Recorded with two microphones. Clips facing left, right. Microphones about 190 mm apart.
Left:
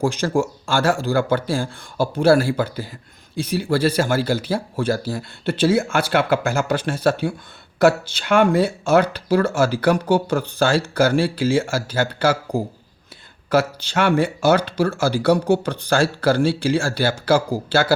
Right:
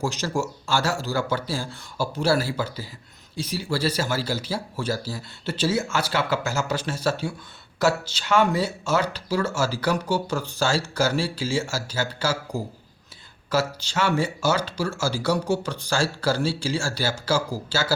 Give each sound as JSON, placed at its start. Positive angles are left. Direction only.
{"t": 0.0, "sound": "speech", "side_deg": 55}